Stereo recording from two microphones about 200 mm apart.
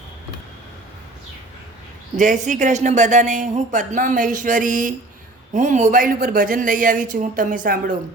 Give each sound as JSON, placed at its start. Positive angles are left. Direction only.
{"t": 2.1, "sound": "speech", "side_deg": -40}